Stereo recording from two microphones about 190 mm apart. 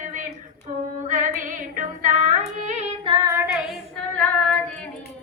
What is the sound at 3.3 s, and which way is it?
Female singing, 10° right (ahead or behind).